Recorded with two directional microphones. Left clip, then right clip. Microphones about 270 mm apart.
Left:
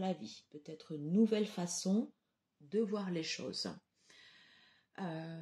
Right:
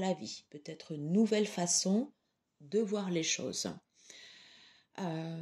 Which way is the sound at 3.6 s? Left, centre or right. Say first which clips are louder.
Right 3 dB; right.